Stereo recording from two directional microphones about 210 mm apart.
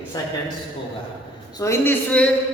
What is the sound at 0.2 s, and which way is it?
Speech, 15° left (ahead or behind).